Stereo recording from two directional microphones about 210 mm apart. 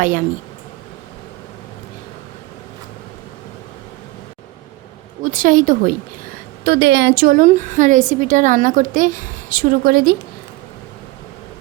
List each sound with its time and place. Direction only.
0.0 s a woman's voice: 40° right (ahead or behind)
5.2 s a woman's voice: 40° right (ahead or behind)
6.7 s a woman's voice: 55° right (ahead or behind)